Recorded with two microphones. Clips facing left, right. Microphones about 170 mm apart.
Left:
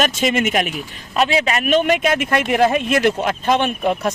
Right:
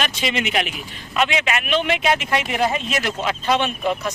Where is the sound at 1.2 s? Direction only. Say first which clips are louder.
Left 3 dB; 35° left (ahead or behind).